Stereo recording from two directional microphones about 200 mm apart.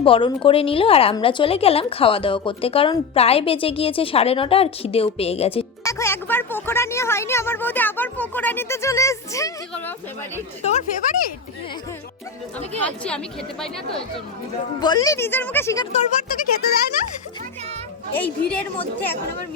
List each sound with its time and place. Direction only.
0.0 s speech: 25° left (ahead or behind)
5.8 s speech: 15° left (ahead or behind)
10.6 s speech: 35° left (ahead or behind)
12.8 s a woman's voice: 5° left (ahead or behind)
14.8 s speech: 20° left (ahead or behind)
15.9 s speech: 35° left (ahead or behind)
18.2 s a woman's voice: 5° left (ahead or behind)